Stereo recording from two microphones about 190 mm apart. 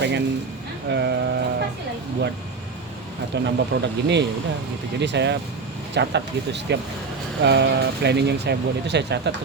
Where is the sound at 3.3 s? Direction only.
65° right (ahead or behind).